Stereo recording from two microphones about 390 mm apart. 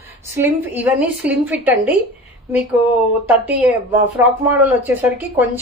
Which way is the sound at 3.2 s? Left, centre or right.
Centre.